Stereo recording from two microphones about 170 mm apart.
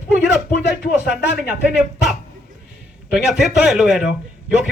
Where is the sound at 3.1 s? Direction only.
Centre (ahead or behind).